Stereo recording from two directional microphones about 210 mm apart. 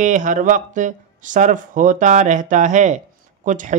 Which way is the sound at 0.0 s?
35° right (ahead or behind).